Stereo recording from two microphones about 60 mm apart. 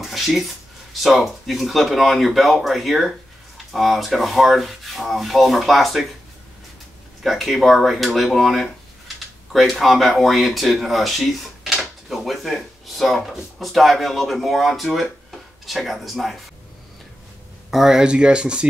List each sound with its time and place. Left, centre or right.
0.0 s a sound: centre
0.9 s speech: centre
7.2 s speech: centre
17.6 s speech: centre